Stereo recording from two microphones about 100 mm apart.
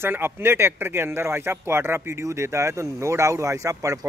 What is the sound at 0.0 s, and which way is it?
Speech, 25° right (ahead or behind).